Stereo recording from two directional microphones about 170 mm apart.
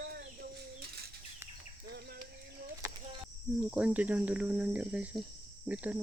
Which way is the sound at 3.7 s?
5° right (ahead or behind).